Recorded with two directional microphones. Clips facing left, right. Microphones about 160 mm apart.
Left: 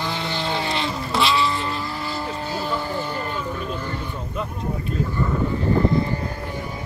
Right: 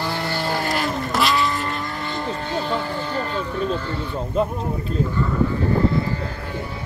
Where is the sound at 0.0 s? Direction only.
10° right (ahead or behind); by 3.9 s 10° left (ahead or behind).